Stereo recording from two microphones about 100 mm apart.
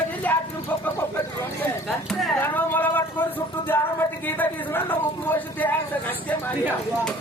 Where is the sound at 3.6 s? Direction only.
20° left (ahead or behind).